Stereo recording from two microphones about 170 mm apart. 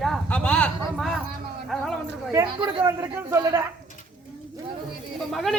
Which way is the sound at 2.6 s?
30° right (ahead or behind).